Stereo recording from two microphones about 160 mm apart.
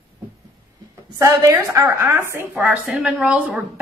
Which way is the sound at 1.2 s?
20° right (ahead or behind).